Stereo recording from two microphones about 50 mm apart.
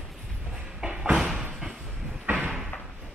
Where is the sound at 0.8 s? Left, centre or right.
Centre.